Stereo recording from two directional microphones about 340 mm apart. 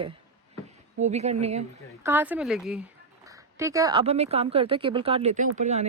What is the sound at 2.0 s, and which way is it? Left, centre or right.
A woman's voice, centre.